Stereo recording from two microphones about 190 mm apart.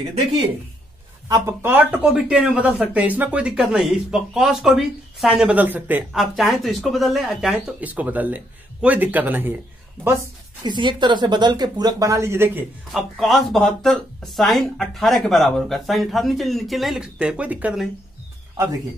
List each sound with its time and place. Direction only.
1.3 s speech: 15° right (ahead or behind)
10.6 s speech: 25° right (ahead or behind)
12.9 s speech: centre (ahead or behind)